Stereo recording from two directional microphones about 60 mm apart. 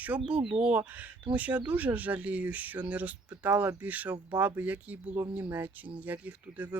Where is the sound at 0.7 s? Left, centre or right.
Right.